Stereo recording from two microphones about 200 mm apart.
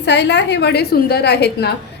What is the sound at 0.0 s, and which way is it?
A woman's voice, 60° left (ahead or behind).